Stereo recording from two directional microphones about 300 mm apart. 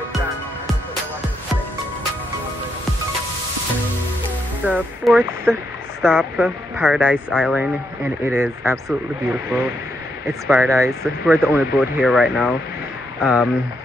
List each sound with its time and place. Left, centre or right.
4.6 s speech: centre